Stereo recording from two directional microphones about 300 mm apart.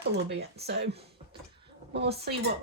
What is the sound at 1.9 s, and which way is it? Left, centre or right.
Speech, right.